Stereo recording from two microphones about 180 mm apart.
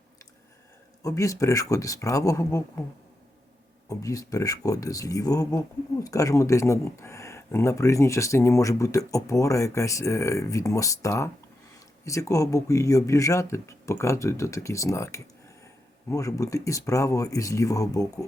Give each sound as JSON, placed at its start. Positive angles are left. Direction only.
{"t": 1.0, "sound": "speech", "side_deg": 20}
{"t": 3.8, "sound": "speech", "side_deg": 20}